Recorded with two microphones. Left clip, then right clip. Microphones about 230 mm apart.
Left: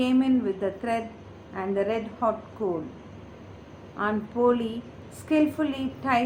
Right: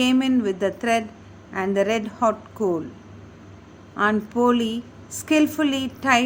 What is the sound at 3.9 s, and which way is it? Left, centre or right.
A woman's voice, right.